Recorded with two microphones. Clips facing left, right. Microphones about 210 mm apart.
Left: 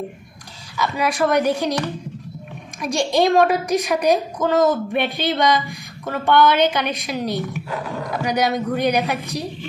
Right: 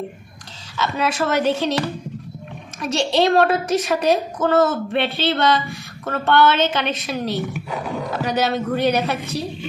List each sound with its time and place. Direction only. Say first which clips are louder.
0.9 s a woman's voice: left 2 dB; 15° left (ahead or behind)
2.8 s a woman's voice: even; 15° left (ahead or behind)